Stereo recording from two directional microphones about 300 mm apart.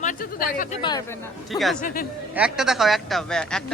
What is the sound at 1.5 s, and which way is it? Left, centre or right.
Speech, centre.